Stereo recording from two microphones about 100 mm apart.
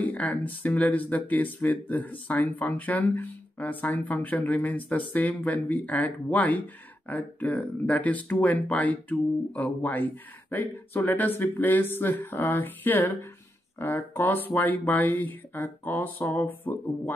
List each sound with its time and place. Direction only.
0.0 s speech: 15° left (ahead or behind)